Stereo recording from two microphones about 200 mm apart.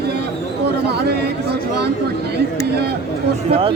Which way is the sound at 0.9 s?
55° right (ahead or behind).